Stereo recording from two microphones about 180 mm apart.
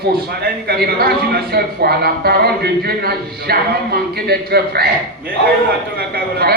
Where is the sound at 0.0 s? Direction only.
60° right (ahead or behind).